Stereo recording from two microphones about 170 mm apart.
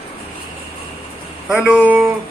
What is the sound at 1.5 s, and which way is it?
Speech, 5° right (ahead or behind).